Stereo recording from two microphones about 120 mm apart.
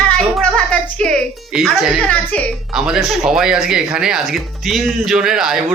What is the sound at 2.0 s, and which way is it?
Speech, 10° left (ahead or behind).